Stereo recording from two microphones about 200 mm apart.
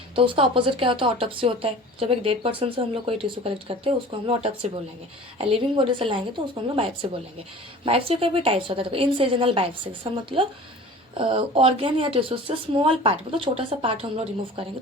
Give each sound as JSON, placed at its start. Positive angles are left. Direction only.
{"t": 0.2, "sound": "speech", "side_deg": -25}